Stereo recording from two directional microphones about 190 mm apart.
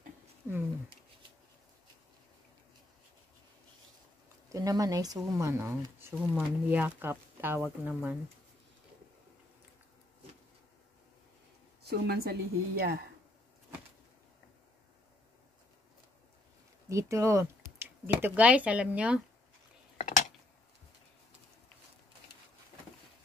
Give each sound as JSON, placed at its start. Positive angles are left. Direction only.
{"t": 4.5, "sound": "speech", "side_deg": -20}
{"t": 11.8, "sound": "a woman's voice", "side_deg": -55}
{"t": 16.9, "sound": "speech", "side_deg": -15}
{"t": 20.0, "sound": "a sound", "side_deg": 40}